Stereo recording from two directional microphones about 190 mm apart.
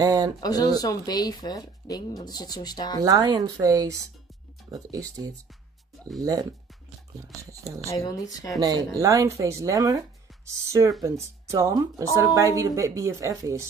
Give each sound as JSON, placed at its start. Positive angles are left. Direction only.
{"t": 0.0, "sound": "speech", "side_deg": -20}
{"t": 0.4, "sound": "speech", "side_deg": 20}
{"t": 3.0, "sound": "speech", "side_deg": -20}
{"t": 7.8, "sound": "speech", "side_deg": 15}
{"t": 8.5, "sound": "speech", "side_deg": -20}